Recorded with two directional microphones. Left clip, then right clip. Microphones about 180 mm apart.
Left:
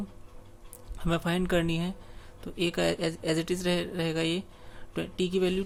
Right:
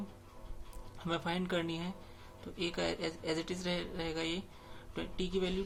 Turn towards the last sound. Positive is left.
turn(degrees=35)  # may be behind; listen again after turning